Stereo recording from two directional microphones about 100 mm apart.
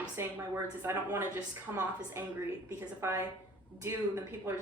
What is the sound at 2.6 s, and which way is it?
Speech, 25° right (ahead or behind).